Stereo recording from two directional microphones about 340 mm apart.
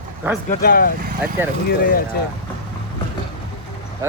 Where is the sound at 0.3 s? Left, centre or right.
Centre.